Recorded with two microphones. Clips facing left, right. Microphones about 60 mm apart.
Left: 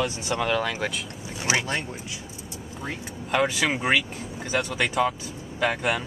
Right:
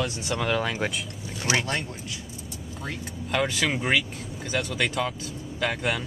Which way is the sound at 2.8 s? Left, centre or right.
Centre.